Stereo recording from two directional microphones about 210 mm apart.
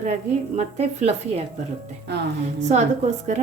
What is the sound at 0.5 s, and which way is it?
Speech, 30° right (ahead or behind).